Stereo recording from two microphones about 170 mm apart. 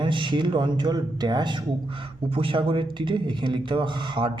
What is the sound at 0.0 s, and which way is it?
Speech, 30° right (ahead or behind).